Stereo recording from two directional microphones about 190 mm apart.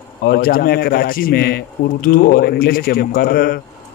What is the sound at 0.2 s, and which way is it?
Speech, 50° left (ahead or behind).